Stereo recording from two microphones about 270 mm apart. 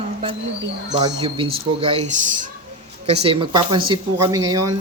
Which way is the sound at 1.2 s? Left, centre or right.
Centre.